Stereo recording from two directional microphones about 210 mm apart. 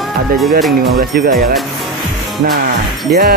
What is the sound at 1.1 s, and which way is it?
Speech, 45° right (ahead or behind).